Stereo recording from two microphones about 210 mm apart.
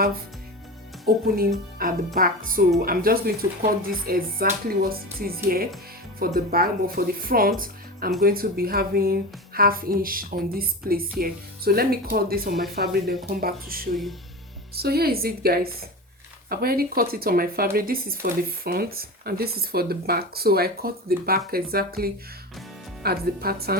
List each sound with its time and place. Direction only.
1.0 s speech: 45° right (ahead or behind)
13.9 s speech: centre (ahead or behind)
14.8 s speech: 50° right (ahead or behind)